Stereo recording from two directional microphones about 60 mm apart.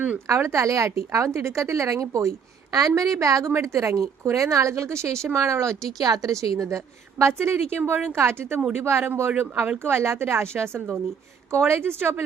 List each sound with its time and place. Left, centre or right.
0.3 s a woman's voice: right
6.0 s a woman's voice: right
7.8 s a woman's voice: right
8.1 s a woman's voice: right